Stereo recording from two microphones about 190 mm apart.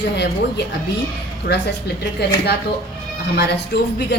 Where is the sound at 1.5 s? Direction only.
50° left (ahead or behind).